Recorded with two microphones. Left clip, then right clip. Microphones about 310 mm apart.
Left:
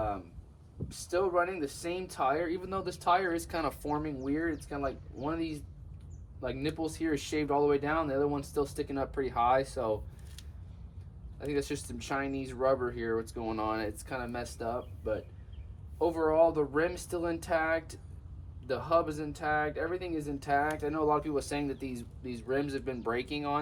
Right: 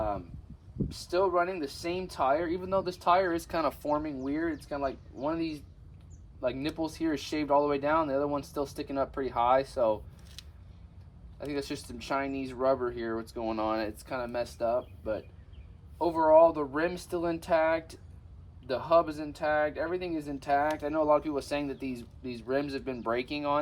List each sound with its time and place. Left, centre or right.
1.1 s speech: centre